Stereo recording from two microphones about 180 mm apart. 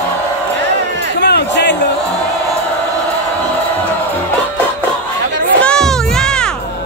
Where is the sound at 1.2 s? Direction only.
70° left (ahead or behind).